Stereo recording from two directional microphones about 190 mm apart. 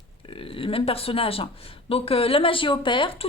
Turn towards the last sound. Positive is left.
turn(degrees=25)  # may be behind; listen again after turning